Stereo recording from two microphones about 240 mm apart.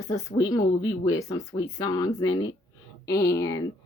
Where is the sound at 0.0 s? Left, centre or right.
Centre.